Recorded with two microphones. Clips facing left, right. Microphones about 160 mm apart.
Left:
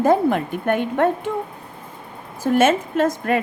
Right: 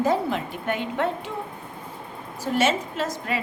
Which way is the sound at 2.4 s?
50° left (ahead or behind).